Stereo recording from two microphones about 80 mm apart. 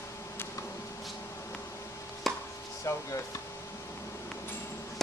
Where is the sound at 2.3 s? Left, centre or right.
Centre.